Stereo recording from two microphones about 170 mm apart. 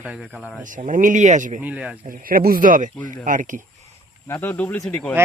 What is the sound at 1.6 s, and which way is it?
Speech, 5° right (ahead or behind).